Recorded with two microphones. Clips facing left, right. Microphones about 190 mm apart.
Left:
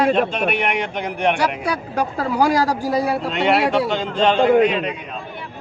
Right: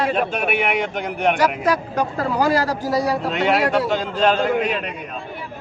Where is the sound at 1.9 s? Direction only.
10° left (ahead or behind).